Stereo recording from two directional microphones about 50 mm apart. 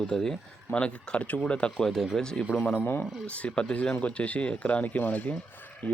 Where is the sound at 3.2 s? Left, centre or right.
Left.